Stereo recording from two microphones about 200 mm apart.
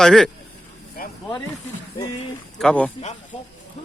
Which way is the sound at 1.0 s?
45° left (ahead or behind).